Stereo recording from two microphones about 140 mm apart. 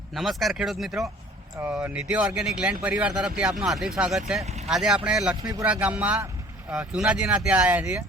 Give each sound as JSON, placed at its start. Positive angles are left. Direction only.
{"t": 0.1, "sound": "speech", "side_deg": 0}
{"t": 5.4, "sound": "speech", "side_deg": -25}
{"t": 5.6, "sound": "speech", "side_deg": -10}